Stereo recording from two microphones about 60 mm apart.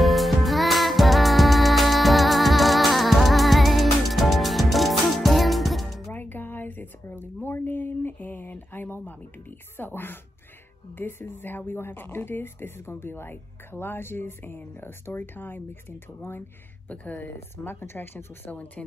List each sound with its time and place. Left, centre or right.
0.0 s music: centre
6.1 s a sound: left
9.8 s speech: left
16.9 s speech: left
17.2 s speech: left